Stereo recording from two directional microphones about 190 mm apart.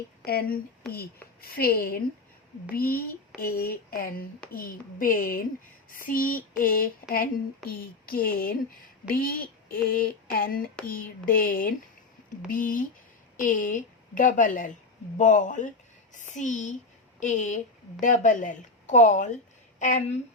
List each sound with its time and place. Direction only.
0.3 s a woman's voice: 55° left (ahead or behind)